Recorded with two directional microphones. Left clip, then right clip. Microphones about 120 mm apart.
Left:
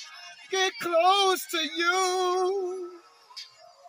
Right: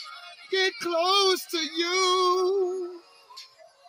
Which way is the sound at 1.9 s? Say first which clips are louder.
Right 7 dB; 50° left (ahead or behind).